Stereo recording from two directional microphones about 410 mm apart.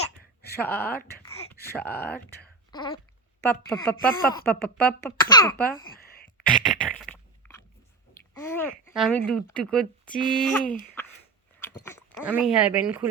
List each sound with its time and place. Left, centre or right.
0.5 s speech: centre
2.7 s babbling: centre
3.4 s speech: centre
5.9 s a sound: left
6.2 s a sound: centre
8.4 s speech: centre